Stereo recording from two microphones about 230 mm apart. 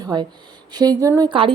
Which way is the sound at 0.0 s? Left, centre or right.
Centre.